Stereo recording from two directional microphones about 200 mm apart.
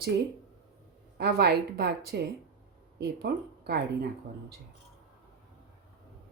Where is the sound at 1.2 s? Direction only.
55° right (ahead or behind).